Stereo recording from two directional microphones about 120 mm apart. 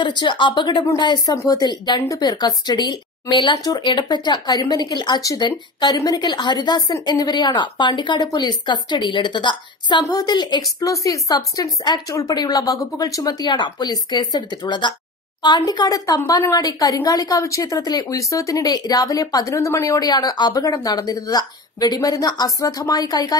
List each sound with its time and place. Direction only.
0.0 s a woman's voice: 40° left (ahead or behind)